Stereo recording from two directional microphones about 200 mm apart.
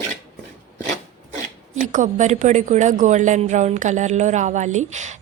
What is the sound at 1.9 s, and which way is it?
Speech, 40° right (ahead or behind).